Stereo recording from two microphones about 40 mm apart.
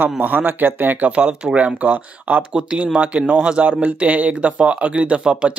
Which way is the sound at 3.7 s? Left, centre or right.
Right.